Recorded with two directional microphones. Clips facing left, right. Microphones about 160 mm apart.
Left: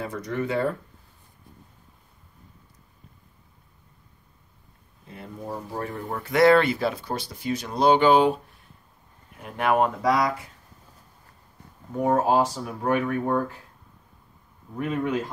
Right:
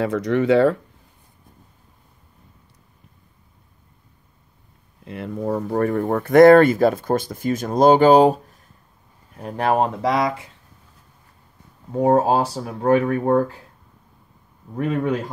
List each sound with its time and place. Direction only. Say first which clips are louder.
0.0 s speech: right 9 dB; 90° right
5.0 s speech: right 11 dB; 80° right; by 10.5 s 25° right (ahead or behind)
11.9 s speech: right 5 dB; 30° right (ahead or behind)